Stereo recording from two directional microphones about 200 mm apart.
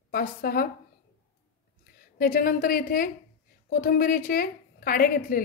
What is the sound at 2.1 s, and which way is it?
A woman's voice, 45° left (ahead or behind).